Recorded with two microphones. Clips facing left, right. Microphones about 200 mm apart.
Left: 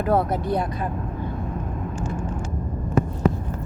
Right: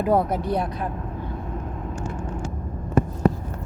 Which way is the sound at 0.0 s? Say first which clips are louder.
Right 1 dB; 15° right (ahead or behind).